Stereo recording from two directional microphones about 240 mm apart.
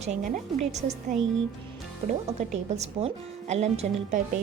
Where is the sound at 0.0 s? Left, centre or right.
Right.